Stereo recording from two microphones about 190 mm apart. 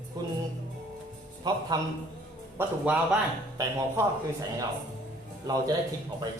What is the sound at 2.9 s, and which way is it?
Speech, 5° right (ahead or behind).